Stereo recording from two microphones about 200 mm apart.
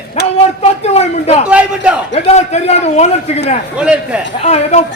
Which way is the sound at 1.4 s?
5° right (ahead or behind).